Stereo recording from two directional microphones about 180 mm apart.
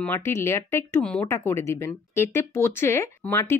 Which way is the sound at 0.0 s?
10° left (ahead or behind).